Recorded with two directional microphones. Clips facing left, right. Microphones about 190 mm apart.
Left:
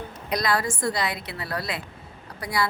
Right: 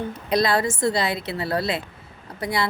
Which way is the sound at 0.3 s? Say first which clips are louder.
Right 4 dB; 25° right (ahead or behind).